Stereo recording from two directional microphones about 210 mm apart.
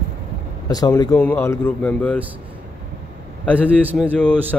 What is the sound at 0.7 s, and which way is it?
Speech, 15° left (ahead or behind).